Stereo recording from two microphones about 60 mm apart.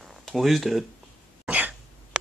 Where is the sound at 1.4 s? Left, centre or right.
Right.